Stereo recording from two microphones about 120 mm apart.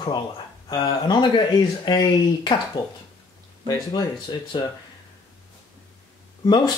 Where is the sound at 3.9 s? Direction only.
45° left (ahead or behind).